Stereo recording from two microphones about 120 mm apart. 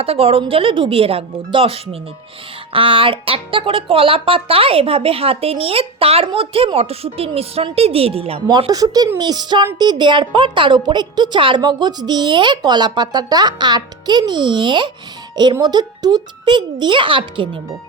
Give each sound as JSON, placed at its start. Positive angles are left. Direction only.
{"t": 0.0, "sound": "speech", "side_deg": -55}
{"t": 8.4, "sound": "a woman's voice", "side_deg": -35}